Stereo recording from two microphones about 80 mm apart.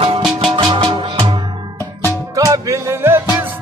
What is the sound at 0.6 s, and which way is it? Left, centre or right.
Music, right.